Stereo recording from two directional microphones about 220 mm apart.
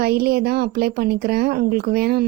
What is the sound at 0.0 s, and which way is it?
Speech, 45° right (ahead or behind).